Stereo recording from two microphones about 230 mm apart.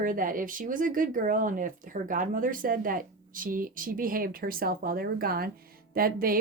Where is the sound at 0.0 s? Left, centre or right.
Right.